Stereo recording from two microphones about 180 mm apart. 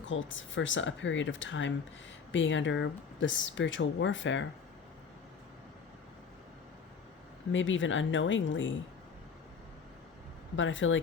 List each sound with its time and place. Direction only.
0.0 s speech: 90° left
7.5 s speech: 90° left
10.6 s speech: 90° left